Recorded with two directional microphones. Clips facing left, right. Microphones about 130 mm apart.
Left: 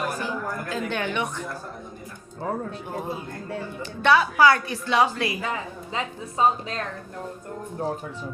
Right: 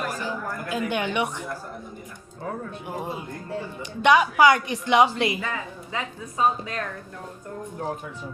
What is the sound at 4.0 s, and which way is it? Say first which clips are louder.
A woman's voice: right 1 dB; 15° right (ahead or behind).